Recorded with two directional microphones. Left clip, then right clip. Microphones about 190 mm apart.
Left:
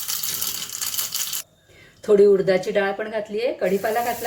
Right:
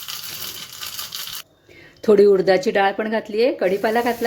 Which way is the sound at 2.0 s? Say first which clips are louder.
Right 2 dB; 45° right (ahead or behind).